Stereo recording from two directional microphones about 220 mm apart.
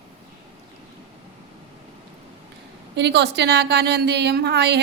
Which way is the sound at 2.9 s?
50° right (ahead or behind).